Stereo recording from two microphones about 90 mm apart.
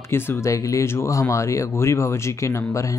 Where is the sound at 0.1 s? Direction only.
25° left (ahead or behind).